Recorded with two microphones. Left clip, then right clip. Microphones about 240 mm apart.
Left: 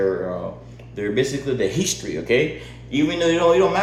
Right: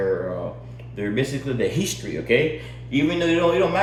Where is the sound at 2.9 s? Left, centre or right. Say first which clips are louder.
Left 2 dB; centre.